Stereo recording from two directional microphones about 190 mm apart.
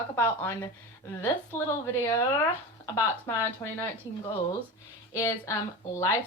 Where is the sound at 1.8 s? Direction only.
15° left (ahead or behind).